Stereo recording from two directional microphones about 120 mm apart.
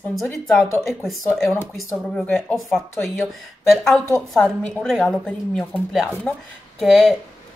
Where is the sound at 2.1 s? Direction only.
15° left (ahead or behind).